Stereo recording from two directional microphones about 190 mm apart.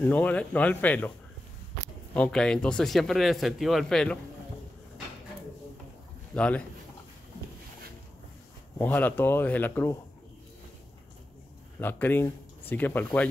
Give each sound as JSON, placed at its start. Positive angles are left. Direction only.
{"t": 0.0, "sound": "speech", "side_deg": 5}
{"t": 2.1, "sound": "speech", "side_deg": 5}
{"t": 6.3, "sound": "speech", "side_deg": 5}
{"t": 8.7, "sound": "speech", "side_deg": 10}
{"t": 11.8, "sound": "speech", "side_deg": 10}